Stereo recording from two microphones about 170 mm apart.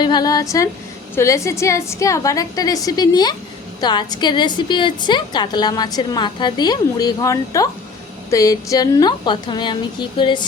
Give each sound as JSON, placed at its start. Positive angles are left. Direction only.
{"t": 0.0, "sound": "a woman's voice", "side_deg": 25}